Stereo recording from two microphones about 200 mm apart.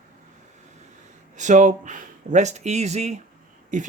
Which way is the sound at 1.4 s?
35° right (ahead or behind).